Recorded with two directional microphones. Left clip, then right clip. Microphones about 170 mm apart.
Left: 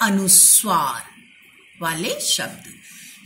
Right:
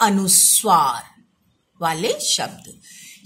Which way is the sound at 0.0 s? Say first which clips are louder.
Right 1 dB; 55° right (ahead or behind).